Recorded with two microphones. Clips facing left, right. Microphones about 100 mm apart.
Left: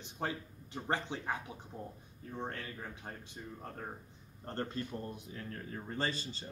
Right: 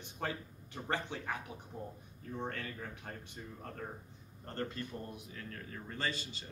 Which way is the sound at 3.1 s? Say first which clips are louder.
Even; 25° left (ahead or behind).